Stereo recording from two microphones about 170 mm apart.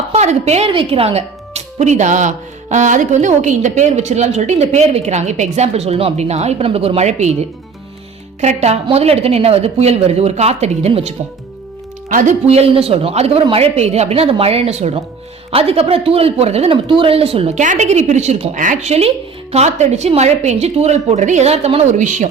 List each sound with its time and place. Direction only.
0.1 s speech: 40° right (ahead or behind)
8.4 s speech: 40° right (ahead or behind)
18.5 s speech: 50° right (ahead or behind)